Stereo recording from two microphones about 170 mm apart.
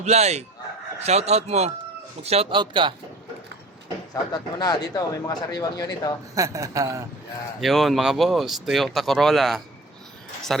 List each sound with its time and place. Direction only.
0.0 s speech: 40° right (ahead or behind)
4.1 s speech: 25° left (ahead or behind)
6.3 s speech: 20° right (ahead or behind)
7.6 s speech: centre (ahead or behind)